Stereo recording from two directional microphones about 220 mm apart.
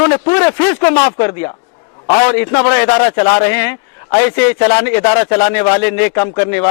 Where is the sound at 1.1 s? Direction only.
25° left (ahead or behind).